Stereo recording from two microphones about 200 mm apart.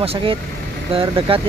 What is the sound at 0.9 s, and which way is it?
Speech, 25° right (ahead or behind).